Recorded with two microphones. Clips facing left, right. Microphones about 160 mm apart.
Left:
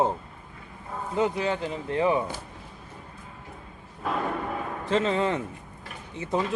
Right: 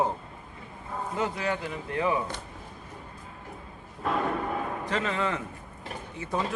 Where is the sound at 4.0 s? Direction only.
Centre (ahead or behind).